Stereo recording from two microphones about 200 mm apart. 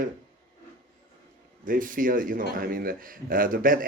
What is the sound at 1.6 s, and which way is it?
Speech, 45° right (ahead or behind).